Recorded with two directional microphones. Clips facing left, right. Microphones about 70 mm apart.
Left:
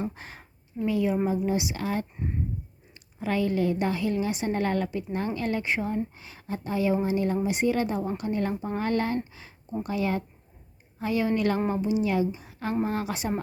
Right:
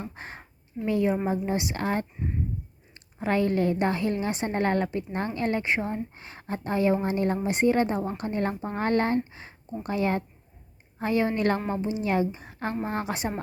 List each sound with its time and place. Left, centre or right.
0.1 s a woman's voice: right
6.1 s a woman's voice: right